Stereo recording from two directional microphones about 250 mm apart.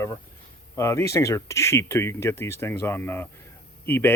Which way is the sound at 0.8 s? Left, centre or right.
Centre.